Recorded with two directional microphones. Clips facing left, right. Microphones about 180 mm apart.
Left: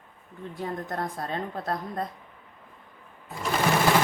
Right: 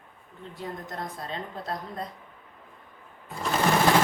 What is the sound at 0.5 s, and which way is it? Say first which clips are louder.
A woman's voice: left 4 dB; 55° left (ahead or behind).